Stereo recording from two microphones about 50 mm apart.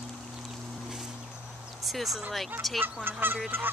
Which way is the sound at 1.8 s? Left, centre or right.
Centre.